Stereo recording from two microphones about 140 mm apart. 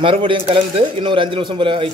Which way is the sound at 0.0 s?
40° right (ahead or behind).